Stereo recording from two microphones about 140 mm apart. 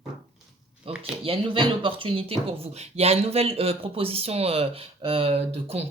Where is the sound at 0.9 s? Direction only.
40° right (ahead or behind).